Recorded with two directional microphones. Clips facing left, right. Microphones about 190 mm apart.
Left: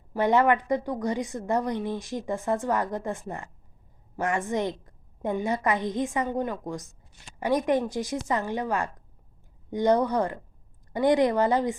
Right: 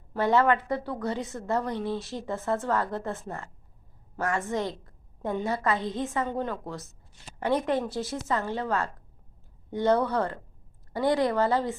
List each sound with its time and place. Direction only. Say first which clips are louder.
0.1 s a woman's voice: left 1 dB; 15° left (ahead or behind)